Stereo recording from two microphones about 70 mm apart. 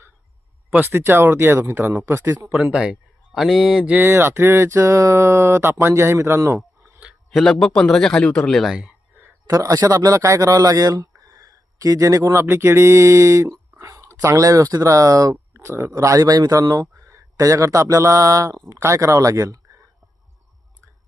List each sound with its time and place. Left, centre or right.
0.7 s speech: right
2.7 s speech: centre
3.3 s speech: centre
4.0 s speech: right
7.3 s a man's voice: centre
8.6 s speech: centre
9.5 s a man's voice: right
12.4 s speech: right
15.5 s speech: right
15.9 s speech: right
16.2 s speech: right